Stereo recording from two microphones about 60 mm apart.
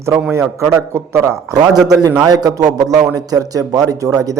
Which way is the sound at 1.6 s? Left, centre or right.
Right.